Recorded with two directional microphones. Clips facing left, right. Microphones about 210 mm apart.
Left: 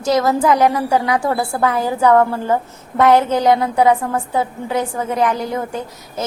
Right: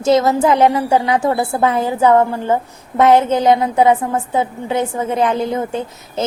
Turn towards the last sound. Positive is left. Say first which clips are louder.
# right 3 dB
turn(degrees=-25)  # may be behind; listen again after turning